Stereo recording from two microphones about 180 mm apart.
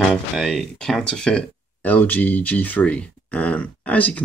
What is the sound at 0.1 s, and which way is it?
Speech, centre (ahead or behind).